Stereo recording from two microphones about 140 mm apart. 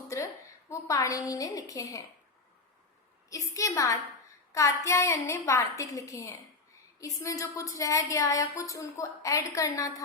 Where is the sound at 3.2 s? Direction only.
25° left (ahead or behind).